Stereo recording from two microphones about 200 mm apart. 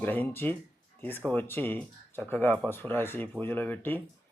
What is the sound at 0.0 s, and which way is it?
Speech, 10° left (ahead or behind).